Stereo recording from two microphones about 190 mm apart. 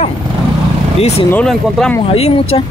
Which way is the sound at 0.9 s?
35° left (ahead or behind).